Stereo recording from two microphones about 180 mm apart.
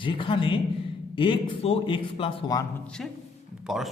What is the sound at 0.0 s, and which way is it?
A man's voice, 30° left (ahead or behind).